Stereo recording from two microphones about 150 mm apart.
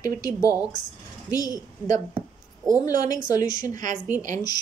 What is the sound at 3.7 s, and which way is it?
Speech, 55° right (ahead or behind).